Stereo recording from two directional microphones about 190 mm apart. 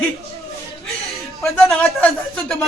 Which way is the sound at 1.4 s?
5° left (ahead or behind).